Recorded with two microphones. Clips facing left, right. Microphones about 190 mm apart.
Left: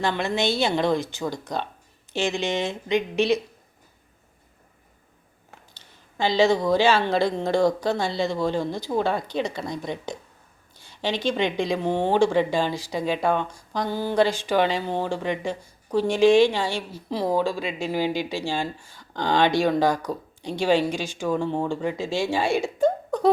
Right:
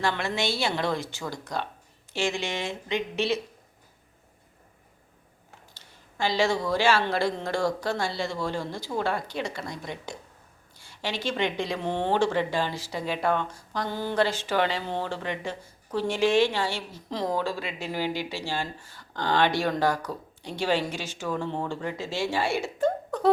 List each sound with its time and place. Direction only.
0.0 s speech: 20° left (ahead or behind)
5.7 s speech: 20° left (ahead or behind)